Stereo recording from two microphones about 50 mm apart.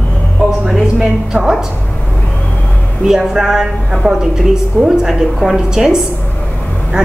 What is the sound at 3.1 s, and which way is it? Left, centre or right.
A woman's voice, centre.